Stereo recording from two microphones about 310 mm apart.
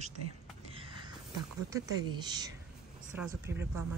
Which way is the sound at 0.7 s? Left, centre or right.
Centre.